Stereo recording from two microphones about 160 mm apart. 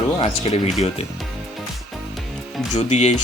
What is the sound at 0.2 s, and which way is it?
Speech, 40° left (ahead or behind).